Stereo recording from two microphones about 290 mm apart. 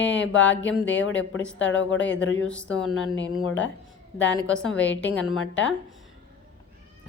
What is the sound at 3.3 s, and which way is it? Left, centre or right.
Speech, left.